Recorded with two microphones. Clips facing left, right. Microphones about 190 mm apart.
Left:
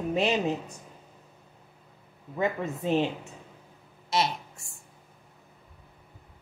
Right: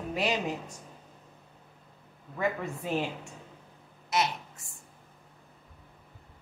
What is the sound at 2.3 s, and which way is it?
Speech, 25° left (ahead or behind).